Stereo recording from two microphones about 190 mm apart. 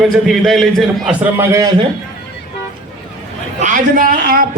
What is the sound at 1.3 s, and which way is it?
Speech, 15° right (ahead or behind).